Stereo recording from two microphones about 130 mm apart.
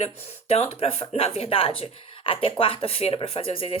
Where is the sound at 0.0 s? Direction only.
50° left (ahead or behind).